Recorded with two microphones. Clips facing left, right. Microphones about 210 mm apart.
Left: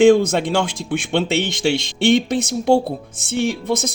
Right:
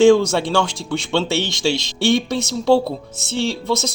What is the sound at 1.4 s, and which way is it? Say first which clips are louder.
Speech: left 1 dB; 60° left (ahead or behind).